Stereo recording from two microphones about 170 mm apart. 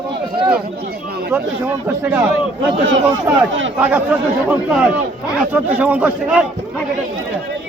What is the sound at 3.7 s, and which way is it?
Speech, 10° right (ahead or behind).